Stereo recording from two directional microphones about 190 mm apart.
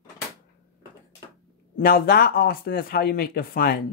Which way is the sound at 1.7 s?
55° left (ahead or behind).